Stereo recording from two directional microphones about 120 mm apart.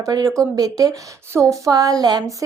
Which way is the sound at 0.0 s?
30° right (ahead or behind).